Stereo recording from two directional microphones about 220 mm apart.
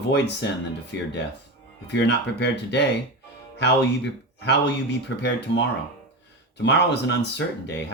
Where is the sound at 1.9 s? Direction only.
55° left (ahead or behind).